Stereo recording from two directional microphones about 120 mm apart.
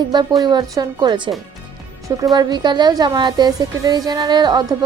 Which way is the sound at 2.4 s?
35° right (ahead or behind).